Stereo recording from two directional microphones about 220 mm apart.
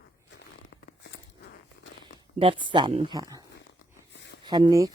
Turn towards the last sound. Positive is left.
turn(degrees=-15)  # may be behind; listen again after turning